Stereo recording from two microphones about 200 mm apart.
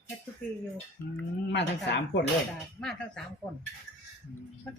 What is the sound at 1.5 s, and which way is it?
Speech, 60° left (ahead or behind).